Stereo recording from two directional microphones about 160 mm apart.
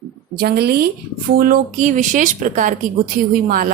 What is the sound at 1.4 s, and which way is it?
A woman's voice, 60° right (ahead or behind).